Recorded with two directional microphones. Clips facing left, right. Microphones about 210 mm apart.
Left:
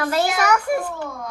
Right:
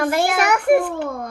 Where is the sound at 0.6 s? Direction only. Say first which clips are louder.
Right 7 dB; 60° right (ahead or behind).